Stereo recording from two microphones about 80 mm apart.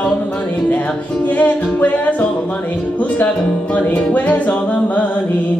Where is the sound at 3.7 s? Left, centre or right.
Centre.